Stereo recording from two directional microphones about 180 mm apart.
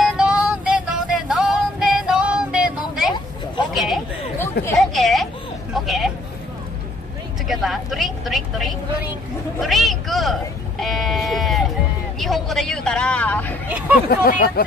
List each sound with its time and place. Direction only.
0.0 s music: 5° right (ahead or behind)
3.7 s a sound: centre (ahead or behind)
4.7 s vehicle: centre (ahead or behind)
7.4 s vehicle: centre (ahead or behind)
9.6 s a sound: centre (ahead or behind)
10.8 s sheep: centre (ahead or behind)
12.2 s vehicle: centre (ahead or behind)
13.7 s hubbub: 10° right (ahead or behind)
14.0 s speech: 55° left (ahead or behind)